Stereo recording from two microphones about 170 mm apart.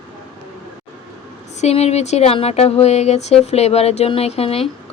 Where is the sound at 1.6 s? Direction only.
40° left (ahead or behind).